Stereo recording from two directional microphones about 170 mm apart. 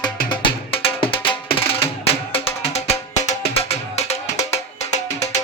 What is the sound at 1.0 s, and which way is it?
Music, 30° left (ahead or behind).